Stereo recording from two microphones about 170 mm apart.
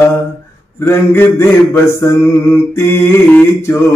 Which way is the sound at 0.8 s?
10° left (ahead or behind).